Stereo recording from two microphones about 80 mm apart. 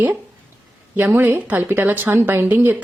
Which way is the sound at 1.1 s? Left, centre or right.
Right.